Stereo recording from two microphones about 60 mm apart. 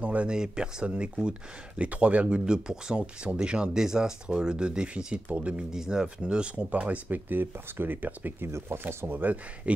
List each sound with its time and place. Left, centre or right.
0.0 s speech: right
5.7 s speech: centre
7.2 s speech: right
8.5 s speech: right